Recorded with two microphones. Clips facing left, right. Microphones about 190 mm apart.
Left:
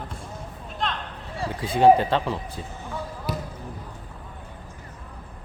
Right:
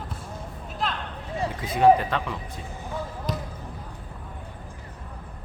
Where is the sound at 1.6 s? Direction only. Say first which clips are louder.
Left 2 dB; 30° left (ahead or behind).